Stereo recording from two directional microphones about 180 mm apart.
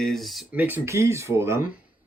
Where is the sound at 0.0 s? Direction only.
Centre (ahead or behind).